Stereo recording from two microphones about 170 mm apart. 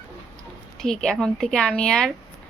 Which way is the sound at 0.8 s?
Centre (ahead or behind).